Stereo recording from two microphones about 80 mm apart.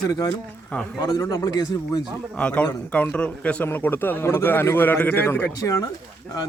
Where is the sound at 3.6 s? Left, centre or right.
Left.